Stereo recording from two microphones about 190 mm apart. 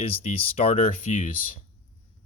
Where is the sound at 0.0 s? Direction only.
35° left (ahead or behind).